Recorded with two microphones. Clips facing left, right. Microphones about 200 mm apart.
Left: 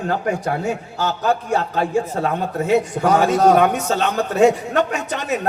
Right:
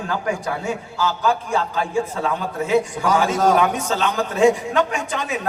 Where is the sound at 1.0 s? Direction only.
40° left (ahead or behind).